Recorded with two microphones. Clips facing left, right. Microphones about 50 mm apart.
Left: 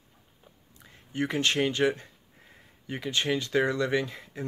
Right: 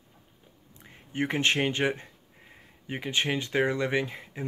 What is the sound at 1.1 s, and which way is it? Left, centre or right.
Speech, right.